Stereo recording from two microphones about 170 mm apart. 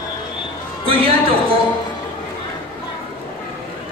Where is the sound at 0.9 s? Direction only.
35° right (ahead or behind).